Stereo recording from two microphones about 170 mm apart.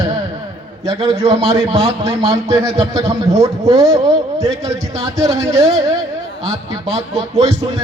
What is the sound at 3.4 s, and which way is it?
Speech, 20° right (ahead or behind).